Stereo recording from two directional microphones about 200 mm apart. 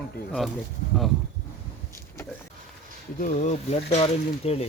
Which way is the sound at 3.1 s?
40° left (ahead or behind).